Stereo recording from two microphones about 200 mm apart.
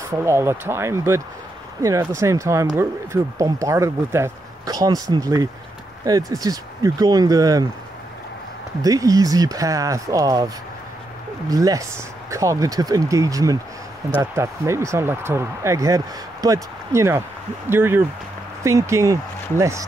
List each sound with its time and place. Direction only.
0.1 s speech: 15° right (ahead or behind)
8.8 s speech: 15° right (ahead or behind)